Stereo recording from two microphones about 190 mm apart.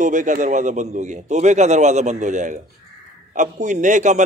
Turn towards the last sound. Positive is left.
turn(degrees=-40)  # may be behind; listen again after turning